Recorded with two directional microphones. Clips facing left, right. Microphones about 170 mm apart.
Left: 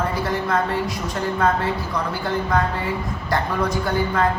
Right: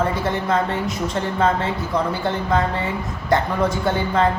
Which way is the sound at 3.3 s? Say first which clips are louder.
Right 4 dB; 25° right (ahead or behind).